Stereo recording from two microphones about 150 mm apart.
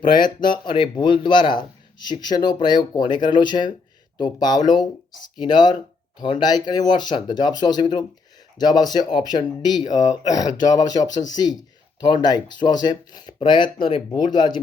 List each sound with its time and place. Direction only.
0.4 s speech: 30° left (ahead or behind)